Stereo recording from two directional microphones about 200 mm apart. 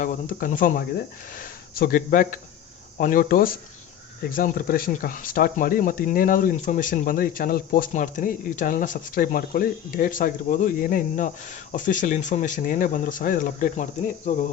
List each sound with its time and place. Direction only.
0.0 s speech: 40° left (ahead or behind)